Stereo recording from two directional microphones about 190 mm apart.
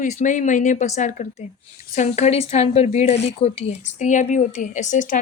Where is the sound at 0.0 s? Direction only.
40° left (ahead or behind).